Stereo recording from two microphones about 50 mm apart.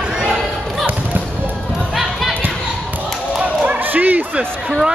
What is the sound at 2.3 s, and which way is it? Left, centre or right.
Basketball bounce, right.